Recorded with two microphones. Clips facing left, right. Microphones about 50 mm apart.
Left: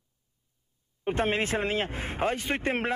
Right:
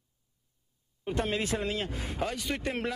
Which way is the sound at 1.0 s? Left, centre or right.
Left.